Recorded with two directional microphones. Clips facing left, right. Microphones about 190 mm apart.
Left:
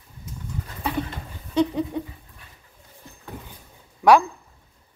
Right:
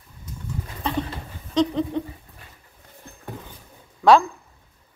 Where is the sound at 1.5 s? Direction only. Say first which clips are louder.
Right 1 dB; 10° left (ahead or behind).